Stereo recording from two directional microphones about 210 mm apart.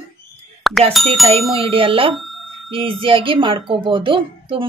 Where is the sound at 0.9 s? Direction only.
Centre (ahead or behind).